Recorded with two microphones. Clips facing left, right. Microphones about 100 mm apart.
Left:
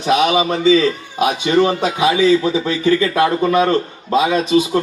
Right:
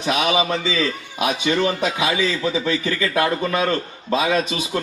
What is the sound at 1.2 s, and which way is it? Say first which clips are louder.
Speech: left 5 dB; 30° left (ahead or behind).